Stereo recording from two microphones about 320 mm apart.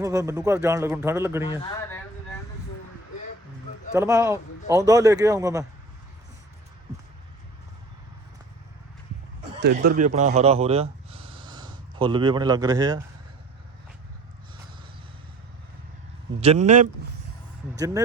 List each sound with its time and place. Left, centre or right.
0.0 s speech: centre
1.5 s a man's voice: centre
3.9 s speech: centre
9.8 s speech: right
16.4 s a man's voice: centre
17.7 s speech: centre